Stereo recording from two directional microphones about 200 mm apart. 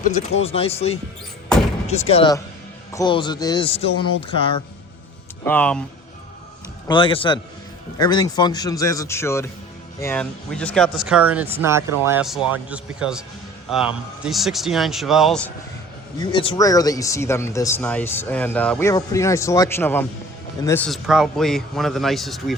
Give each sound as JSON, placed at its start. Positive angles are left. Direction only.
{"t": 0.0, "sound": "speech", "side_deg": 35}
{"t": 1.5, "sound": "slam", "side_deg": 0}
{"t": 1.9, "sound": "speech", "side_deg": 30}
{"t": 5.5, "sound": "speech", "side_deg": 5}
{"t": 6.8, "sound": "speech", "side_deg": 25}
{"t": 16.1, "sound": "speech", "side_deg": 20}